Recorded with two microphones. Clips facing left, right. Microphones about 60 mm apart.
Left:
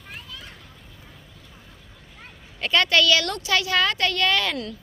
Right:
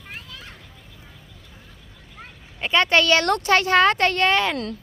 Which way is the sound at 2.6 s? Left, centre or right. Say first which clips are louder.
Right 2 dB; right.